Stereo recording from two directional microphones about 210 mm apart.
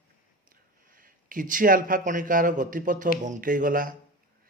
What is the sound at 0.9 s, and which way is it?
Speech, 40° right (ahead or behind).